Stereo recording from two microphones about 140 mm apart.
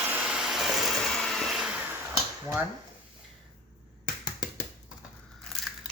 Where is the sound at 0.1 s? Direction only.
5° right (ahead or behind).